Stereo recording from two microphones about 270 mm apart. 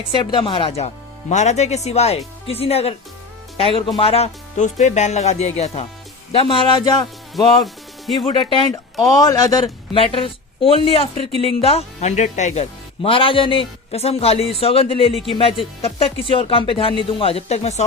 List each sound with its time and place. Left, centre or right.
0.1 s speech: centre
7.6 s speech: centre
8.3 s speech: centre
15.1 s speech: centre
15.8 s speech: left